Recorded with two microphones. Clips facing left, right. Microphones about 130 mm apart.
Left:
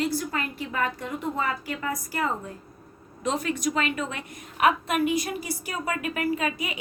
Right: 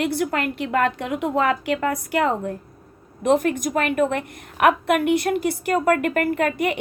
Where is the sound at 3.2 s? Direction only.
55° right (ahead or behind).